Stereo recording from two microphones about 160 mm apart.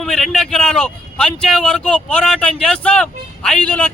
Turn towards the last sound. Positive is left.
turn(degrees=10)  # may be behind; listen again after turning